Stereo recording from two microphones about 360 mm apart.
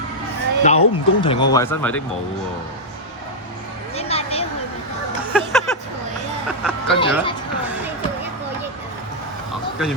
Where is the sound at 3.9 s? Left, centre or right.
Centre.